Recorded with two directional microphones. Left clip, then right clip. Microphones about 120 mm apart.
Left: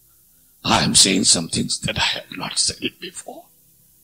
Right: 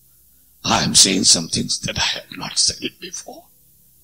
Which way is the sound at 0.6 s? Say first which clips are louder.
Right 1 dB; 55° right (ahead or behind).